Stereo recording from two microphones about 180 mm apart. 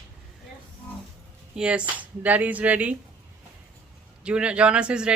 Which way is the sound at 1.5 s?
5° right (ahead or behind).